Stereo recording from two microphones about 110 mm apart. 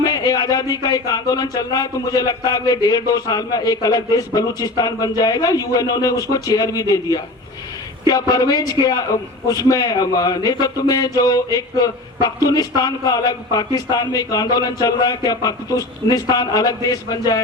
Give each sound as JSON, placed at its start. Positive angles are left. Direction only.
{"t": 0.0, "sound": "a man's voice", "side_deg": 35}